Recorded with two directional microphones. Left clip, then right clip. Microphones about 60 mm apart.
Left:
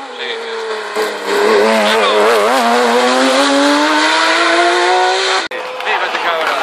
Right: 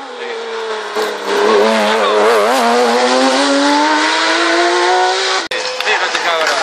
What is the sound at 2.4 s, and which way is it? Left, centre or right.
Vehicle, centre.